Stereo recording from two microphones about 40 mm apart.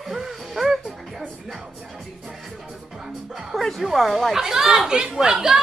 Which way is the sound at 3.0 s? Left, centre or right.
Centre.